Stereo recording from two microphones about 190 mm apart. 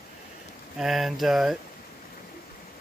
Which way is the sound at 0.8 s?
Centre (ahead or behind).